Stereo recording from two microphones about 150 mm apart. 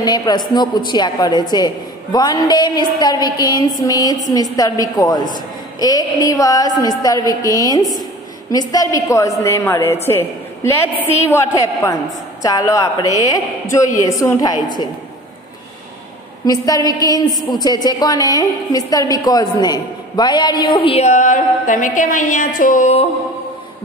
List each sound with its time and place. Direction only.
0.0 s a woman's voice: 25° left (ahead or behind)
16.4 s a woman's voice: 25° left (ahead or behind)
21.1 s a woman's voice: 60° left (ahead or behind)